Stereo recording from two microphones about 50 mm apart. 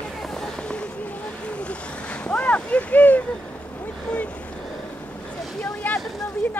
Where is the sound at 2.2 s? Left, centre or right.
Left.